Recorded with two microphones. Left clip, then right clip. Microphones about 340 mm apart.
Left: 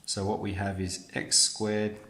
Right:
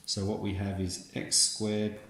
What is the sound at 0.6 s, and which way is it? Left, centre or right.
Speech, left.